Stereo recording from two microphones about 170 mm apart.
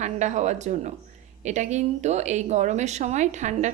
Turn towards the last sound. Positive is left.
turn(degrees=-45)  # may be behind; listen again after turning